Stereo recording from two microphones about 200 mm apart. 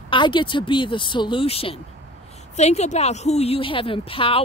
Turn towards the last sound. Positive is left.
turn(degrees=25)  # may be behind; listen again after turning